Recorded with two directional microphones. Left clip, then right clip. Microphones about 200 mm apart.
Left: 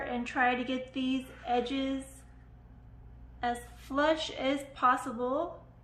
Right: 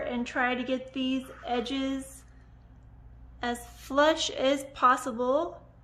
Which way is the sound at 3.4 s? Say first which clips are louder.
Even; 50° right (ahead or behind).